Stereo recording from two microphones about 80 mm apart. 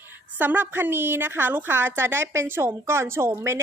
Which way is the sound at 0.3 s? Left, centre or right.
Right.